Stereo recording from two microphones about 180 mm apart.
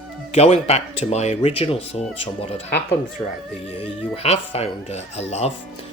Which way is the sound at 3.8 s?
35° left (ahead or behind).